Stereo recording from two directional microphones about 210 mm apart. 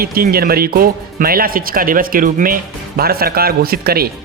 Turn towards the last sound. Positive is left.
turn(degrees=-45)  # may be behind; listen again after turning